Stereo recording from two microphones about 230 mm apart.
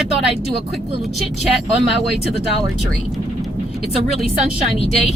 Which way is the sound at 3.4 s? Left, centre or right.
Centre.